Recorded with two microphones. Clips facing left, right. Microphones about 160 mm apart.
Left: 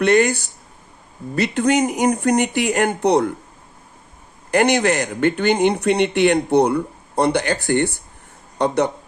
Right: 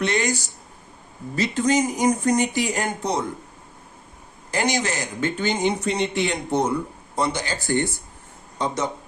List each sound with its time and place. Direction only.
0.0 s speech: 55° left (ahead or behind)
4.5 s speech: 60° left (ahead or behind)